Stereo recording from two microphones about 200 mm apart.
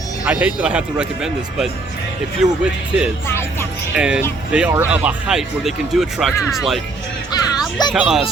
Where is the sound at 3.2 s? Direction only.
10° left (ahead or behind).